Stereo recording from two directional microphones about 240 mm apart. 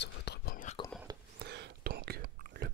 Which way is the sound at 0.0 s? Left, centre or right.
Left.